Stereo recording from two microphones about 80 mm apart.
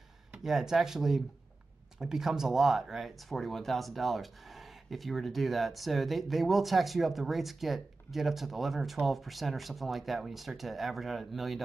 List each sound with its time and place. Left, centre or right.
0.4 s speech: centre